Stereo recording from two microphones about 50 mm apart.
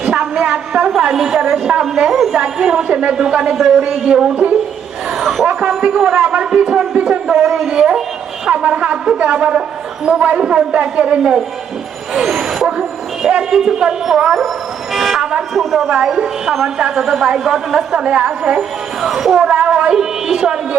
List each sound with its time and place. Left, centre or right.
0.0 s a woman's voice: right; by 2.3 s centre
2.3 s a woman's voice: centre
5.6 s a man's voice: right
12.1 s a woman's voice: centre
14.9 s speech: centre
16.0 s a woman's voice: centre
18.0 s a man's voice: centre
19.0 s speech: centre